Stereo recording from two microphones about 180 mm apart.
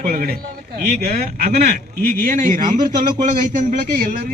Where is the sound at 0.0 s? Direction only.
50° right (ahead or behind).